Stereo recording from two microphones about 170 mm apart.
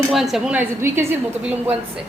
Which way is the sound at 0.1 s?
Centre (ahead or behind).